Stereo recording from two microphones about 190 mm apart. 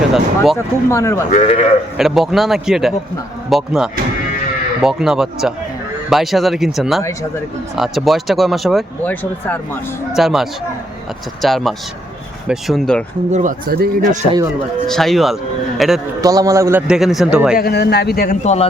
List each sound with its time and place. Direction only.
0.5 s speech: 15° left (ahead or behind)
1.3 s speech: 35° left (ahead or behind)
2.0 s speech: centre (ahead or behind)
13.3 s a man's voice: 45° right (ahead or behind)
14.8 s speech: centre (ahead or behind)
16.2 s a man's voice: 20° right (ahead or behind)
16.8 s speech: 5° right (ahead or behind)
17.6 s a man's voice: 60° left (ahead or behind)
18.4 s speech: 35° left (ahead or behind)